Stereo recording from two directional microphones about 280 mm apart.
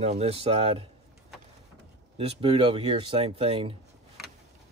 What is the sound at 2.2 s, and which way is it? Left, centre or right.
Speech, centre.